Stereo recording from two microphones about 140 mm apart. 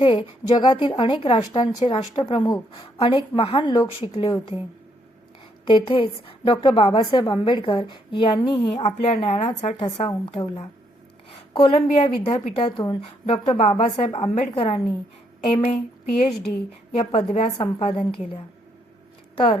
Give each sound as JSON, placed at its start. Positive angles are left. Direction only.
{"t": 0.0, "sound": "a woman's voice", "side_deg": 35}
{"t": 5.6, "sound": "a woman's voice", "side_deg": 40}
{"t": 17.0, "sound": "a woman's voice", "side_deg": 40}